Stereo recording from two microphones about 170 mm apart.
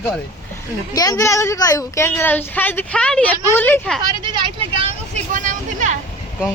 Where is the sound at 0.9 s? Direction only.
20° left (ahead or behind).